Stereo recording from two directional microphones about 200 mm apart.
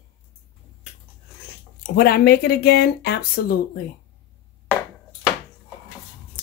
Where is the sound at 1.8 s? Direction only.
50° left (ahead or behind).